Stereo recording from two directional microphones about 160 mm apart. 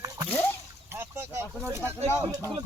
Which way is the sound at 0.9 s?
15° right (ahead or behind).